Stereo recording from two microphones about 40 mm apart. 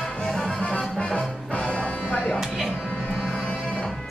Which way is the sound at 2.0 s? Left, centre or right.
Left.